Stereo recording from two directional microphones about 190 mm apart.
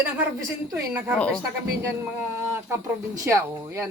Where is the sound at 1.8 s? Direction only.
5° right (ahead or behind).